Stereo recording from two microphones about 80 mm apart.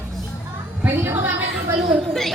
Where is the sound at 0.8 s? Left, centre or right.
Right.